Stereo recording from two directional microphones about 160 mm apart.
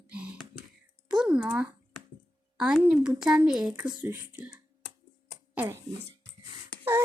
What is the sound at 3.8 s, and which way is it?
Child singing, 15° right (ahead or behind).